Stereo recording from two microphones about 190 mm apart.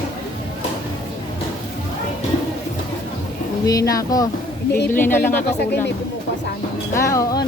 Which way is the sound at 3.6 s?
20° left (ahead or behind).